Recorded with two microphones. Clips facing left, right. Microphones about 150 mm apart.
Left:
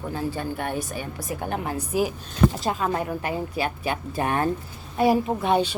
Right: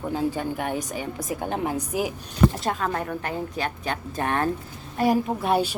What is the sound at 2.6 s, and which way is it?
Speech, 5° left (ahead or behind).